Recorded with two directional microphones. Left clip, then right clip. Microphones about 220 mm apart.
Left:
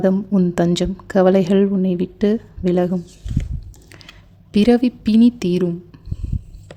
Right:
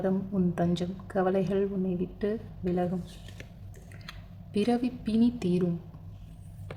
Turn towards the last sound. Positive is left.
turn(degrees=40)  # may be behind; listen again after turning